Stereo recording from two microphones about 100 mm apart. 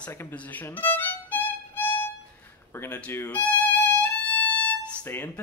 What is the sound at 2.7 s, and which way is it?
Speech, 15° left (ahead or behind).